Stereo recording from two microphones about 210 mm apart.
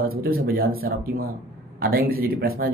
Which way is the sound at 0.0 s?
45° right (ahead or behind).